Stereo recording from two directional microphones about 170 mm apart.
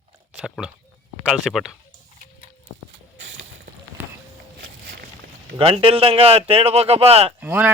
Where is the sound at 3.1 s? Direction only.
90° right.